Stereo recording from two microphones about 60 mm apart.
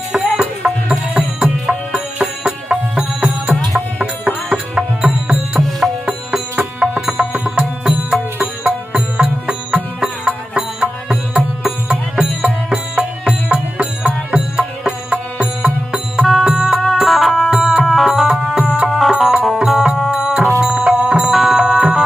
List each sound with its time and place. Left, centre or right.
0.1 s music: centre
4.4 s music: centre
6.6 s music: right
16.4 s music: centre